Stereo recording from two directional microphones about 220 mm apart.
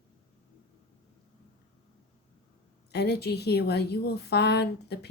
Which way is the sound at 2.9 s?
45° left (ahead or behind).